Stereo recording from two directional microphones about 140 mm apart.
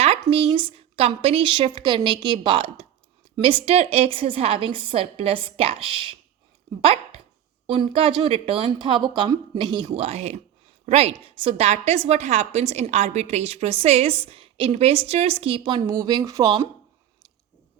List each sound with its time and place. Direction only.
0.0 s a woman's voice: 45° right (ahead or behind); by 16.6 s 25° right (ahead or behind)